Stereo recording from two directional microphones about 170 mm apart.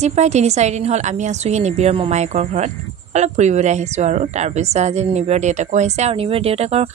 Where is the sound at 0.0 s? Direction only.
40° right (ahead or behind).